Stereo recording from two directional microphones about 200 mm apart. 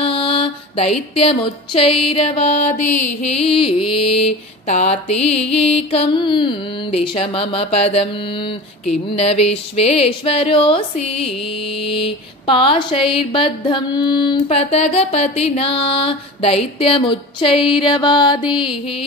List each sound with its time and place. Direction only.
0.0 s music: 25° left (ahead or behind)
3.2 s mantra: 30° left (ahead or behind)
12.4 s mantra: 25° left (ahead or behind)